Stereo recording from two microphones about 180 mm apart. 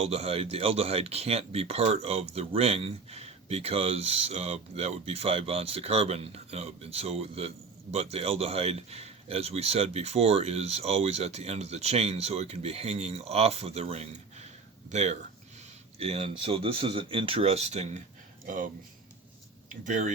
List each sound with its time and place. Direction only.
0.0 s speech: 35° right (ahead or behind)
18.4 s speech: 50° right (ahead or behind)
19.8 s speech: 45° right (ahead or behind)